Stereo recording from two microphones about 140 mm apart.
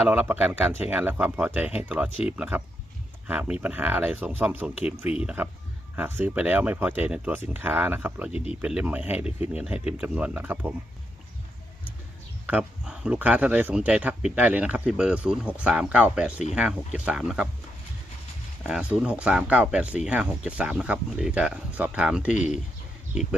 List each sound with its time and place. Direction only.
0.1 s speech: 10° right (ahead or behind)
12.5 s speech: 10° right (ahead or behind)
18.6 s speech: 5° right (ahead or behind)
22.4 s speech: 55° left (ahead or behind)